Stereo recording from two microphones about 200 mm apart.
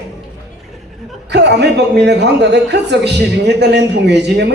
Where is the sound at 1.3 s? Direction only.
60° right (ahead or behind).